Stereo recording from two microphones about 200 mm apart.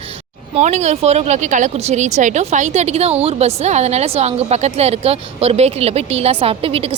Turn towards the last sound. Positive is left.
turn(degrees=-25)  # may be behind; listen again after turning